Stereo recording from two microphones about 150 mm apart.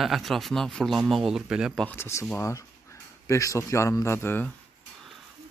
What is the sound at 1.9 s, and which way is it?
Speech, 15° left (ahead or behind).